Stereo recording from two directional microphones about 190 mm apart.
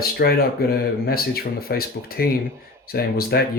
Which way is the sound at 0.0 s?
55° left (ahead or behind).